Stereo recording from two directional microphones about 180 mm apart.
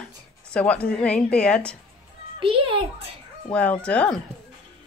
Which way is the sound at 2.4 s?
30° right (ahead or behind).